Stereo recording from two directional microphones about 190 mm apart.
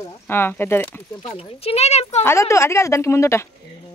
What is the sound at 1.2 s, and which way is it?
Speech, 35° left (ahead or behind).